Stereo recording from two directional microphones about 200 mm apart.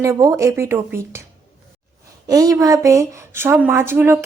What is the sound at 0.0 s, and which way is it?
Speech, 15° right (ahead or behind).